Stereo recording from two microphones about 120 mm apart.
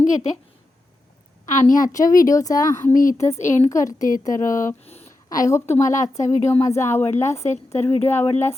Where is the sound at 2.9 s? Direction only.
90° left.